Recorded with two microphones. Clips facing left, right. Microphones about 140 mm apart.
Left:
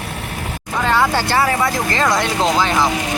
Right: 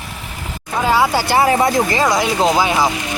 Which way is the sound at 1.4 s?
20° right (ahead or behind).